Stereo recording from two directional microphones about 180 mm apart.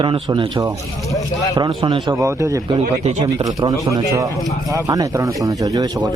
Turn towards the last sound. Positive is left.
turn(degrees=-20)  # may be behind; listen again after turning